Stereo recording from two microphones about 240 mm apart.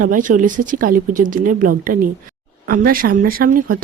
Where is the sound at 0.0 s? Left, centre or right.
Right.